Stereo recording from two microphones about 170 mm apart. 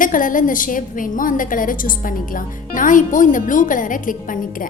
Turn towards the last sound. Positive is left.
turn(degrees=50)  # may be behind; listen again after turning